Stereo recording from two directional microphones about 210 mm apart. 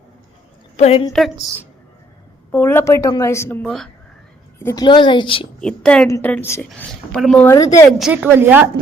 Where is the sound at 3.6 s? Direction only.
Centre (ahead or behind).